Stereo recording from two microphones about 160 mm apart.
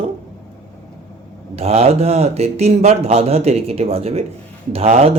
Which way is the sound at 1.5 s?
40° right (ahead or behind).